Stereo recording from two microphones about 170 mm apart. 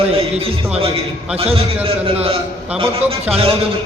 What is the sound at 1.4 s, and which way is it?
A man's voice, 35° right (ahead or behind).